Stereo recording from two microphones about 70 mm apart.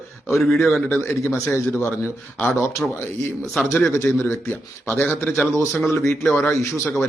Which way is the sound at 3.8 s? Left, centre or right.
Left.